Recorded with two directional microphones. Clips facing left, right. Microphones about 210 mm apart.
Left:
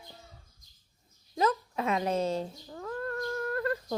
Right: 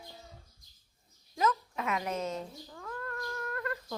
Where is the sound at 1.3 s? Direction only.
30° left (ahead or behind).